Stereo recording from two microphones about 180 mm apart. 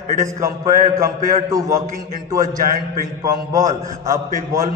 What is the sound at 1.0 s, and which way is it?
Speech, 20° right (ahead or behind).